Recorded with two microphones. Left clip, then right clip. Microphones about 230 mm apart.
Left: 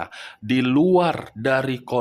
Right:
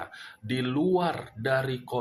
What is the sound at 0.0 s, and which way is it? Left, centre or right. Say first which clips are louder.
Speech: left 8 dB; left.